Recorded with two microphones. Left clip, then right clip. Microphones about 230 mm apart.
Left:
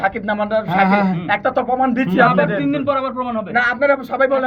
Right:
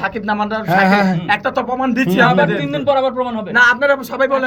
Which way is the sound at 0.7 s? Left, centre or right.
Right.